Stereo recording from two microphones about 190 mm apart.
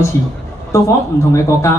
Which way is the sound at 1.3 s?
15° left (ahead or behind).